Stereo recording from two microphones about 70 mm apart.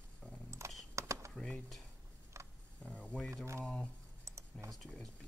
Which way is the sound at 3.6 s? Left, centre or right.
Centre.